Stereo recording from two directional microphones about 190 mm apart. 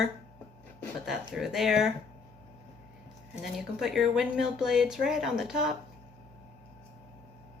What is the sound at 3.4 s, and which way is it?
Speech, centre (ahead or behind).